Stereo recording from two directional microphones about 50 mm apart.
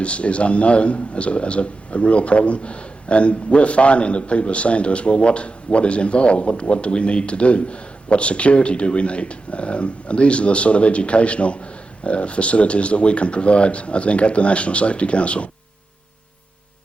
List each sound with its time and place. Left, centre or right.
0.0 s speech: left